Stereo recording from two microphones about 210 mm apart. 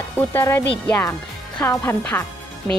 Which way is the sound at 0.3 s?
10° left (ahead or behind).